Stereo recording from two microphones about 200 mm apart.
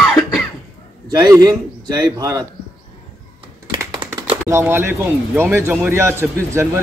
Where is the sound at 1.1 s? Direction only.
20° right (ahead or behind).